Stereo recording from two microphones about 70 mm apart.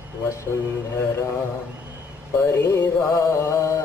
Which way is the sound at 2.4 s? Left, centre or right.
Left.